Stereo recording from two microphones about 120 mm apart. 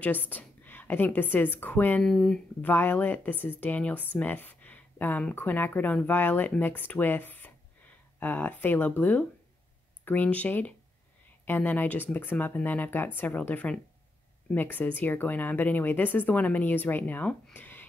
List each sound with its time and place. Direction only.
0.0 s a woman's voice: 15° left (ahead or behind)
2.0 s speech: centre (ahead or behind)
2.6 s speech: 15° left (ahead or behind)